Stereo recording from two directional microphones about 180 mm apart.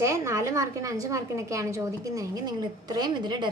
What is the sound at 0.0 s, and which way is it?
A woman's voice, 15° right (ahead or behind).